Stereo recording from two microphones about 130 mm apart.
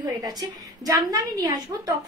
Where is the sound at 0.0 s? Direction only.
30° right (ahead or behind).